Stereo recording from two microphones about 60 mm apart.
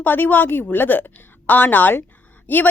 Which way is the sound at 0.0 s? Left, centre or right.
Left.